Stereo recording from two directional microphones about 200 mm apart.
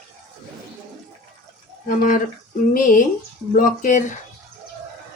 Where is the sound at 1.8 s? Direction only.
45° left (ahead or behind).